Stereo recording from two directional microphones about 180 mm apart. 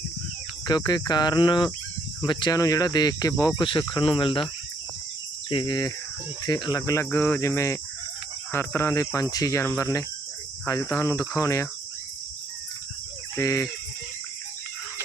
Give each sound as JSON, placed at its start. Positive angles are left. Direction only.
{"t": 0.7, "sound": "speech", "side_deg": 25}
{"t": 5.5, "sound": "speech", "side_deg": 25}
{"t": 13.3, "sound": "speech", "side_deg": 15}